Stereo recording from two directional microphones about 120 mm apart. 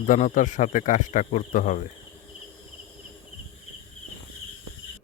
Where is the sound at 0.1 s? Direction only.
90° left.